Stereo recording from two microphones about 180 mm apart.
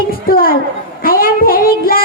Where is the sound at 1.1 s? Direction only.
55° left (ahead or behind).